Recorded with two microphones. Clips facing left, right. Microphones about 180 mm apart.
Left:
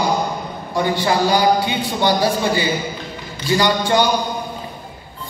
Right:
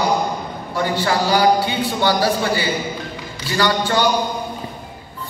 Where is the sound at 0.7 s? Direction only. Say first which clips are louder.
Left 2 dB; 15° left (ahead or behind).